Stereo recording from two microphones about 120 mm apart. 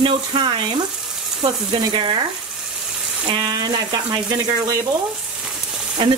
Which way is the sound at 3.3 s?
35° right (ahead or behind).